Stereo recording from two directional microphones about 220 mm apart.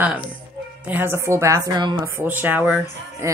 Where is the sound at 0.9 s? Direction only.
10° right (ahead or behind).